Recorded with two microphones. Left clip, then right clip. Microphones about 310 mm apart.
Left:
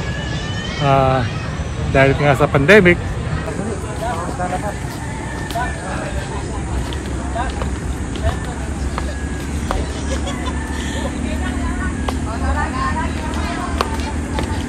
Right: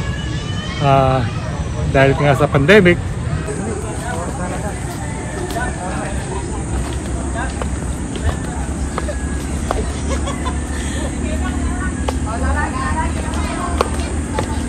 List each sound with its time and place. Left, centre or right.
0.8 s speech: centre